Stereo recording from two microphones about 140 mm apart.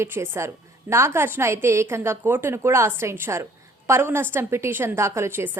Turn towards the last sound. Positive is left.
turn(degrees=-15)  # may be behind; listen again after turning